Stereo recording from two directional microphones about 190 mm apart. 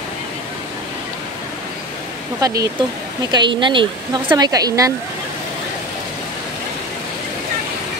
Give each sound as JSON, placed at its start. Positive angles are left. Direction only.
{"t": 2.4, "sound": "speech", "side_deg": -20}